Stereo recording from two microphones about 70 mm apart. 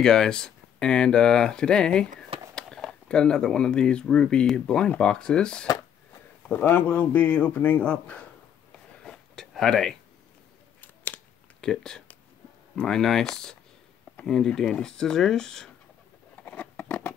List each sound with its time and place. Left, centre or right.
0.0 s speech: centre
6.6 s speech: left
9.0 s a sound: centre
11.6 s speech: centre
16.4 s scissors: left